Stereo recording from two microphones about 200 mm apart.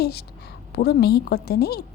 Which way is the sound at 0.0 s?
55° left (ahead or behind).